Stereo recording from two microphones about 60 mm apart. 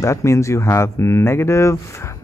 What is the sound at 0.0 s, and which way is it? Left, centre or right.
Speech, left.